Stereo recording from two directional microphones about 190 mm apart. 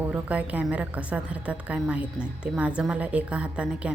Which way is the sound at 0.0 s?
5° right (ahead or behind).